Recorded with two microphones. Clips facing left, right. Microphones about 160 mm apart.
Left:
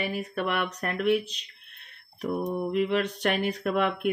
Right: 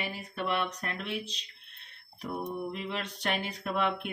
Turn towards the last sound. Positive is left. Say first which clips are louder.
# left 5 dB
turn(degrees=50)  # may be behind; listen again after turning